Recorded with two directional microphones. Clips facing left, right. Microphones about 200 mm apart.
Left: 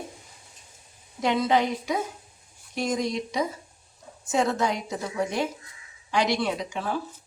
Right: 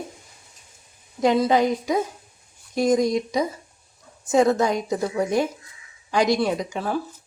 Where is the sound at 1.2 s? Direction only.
40° right (ahead or behind).